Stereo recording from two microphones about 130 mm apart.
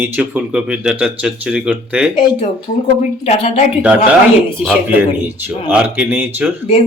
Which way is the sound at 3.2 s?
55° left (ahead or behind).